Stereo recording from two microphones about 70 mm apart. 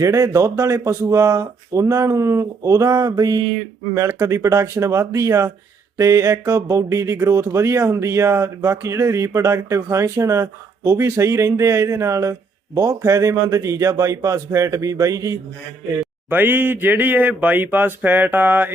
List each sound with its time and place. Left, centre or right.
0.0 s speech: right
3.9 s speech: right
16.3 s speech: right